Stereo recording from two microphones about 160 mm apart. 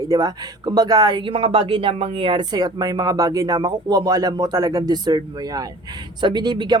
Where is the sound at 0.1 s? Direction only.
25° right (ahead or behind).